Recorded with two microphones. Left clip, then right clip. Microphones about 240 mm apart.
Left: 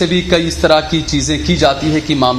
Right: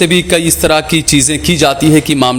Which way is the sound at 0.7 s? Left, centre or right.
Right.